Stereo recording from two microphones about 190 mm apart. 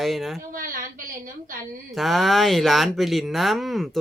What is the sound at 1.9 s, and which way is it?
Speech, centre (ahead or behind).